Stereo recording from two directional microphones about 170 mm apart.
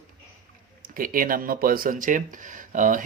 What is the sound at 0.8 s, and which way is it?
A man's voice, 55° right (ahead or behind).